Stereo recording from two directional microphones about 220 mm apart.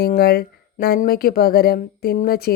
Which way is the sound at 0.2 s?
45° left (ahead or behind).